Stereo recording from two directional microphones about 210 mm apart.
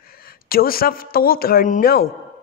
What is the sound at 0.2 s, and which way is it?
A woman's voice, 45° left (ahead or behind).